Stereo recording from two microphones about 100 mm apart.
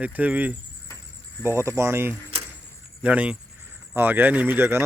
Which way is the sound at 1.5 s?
30° right (ahead or behind).